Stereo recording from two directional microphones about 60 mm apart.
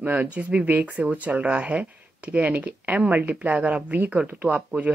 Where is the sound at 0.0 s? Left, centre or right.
Right.